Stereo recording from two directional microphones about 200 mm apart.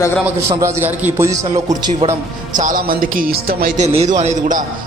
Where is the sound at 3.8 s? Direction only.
30° right (ahead or behind).